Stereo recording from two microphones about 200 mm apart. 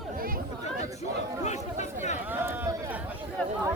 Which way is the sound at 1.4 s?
35° left (ahead or behind).